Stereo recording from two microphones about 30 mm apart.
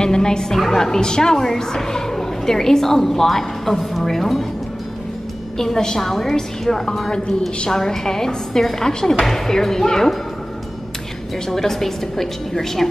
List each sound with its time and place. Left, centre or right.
0.0 s a sound: left
0.7 s a woman's voice: centre
5.6 s a woman's voice: centre
11.4 s a woman's voice: centre